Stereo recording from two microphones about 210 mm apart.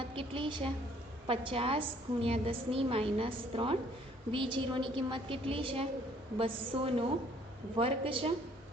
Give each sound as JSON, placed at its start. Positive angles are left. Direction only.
{"t": 0.1, "sound": "a woman's voice", "side_deg": -25}